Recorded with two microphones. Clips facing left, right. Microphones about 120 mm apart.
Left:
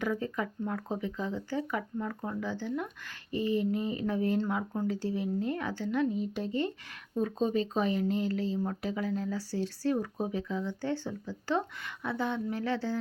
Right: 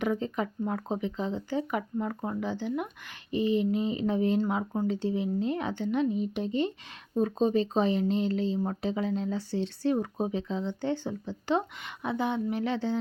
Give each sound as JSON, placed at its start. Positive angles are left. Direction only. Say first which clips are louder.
{"t": 0.0, "sound": "speech", "louder": "right 3 dB", "side_deg": -20}
{"t": 7.2, "sound": "speech", "louder": "right 4 dB", "side_deg": -30}